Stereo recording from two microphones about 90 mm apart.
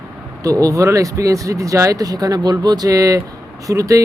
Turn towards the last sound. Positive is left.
turn(degrees=-40)  # may be behind; listen again after turning